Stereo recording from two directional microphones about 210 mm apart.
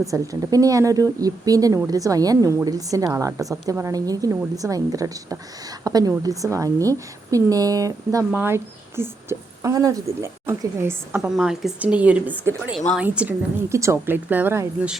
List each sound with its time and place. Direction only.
0.1 s speech: 15° right (ahead or behind)